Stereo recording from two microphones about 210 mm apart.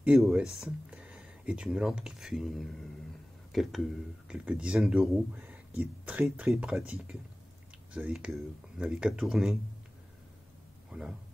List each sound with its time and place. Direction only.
0.0 s speech: centre (ahead or behind)
10.9 s a man's voice: 5° right (ahead or behind)